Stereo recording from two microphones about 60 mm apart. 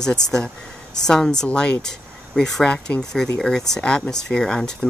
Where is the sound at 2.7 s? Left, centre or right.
Centre.